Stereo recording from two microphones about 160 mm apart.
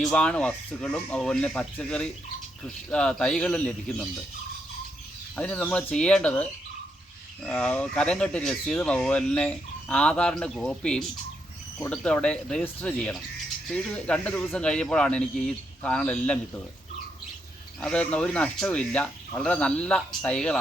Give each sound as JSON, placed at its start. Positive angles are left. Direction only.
{"t": 0.0, "sound": "speech", "side_deg": 5}
{"t": 5.4, "sound": "speech", "side_deg": 10}
{"t": 17.7, "sound": "speech", "side_deg": 5}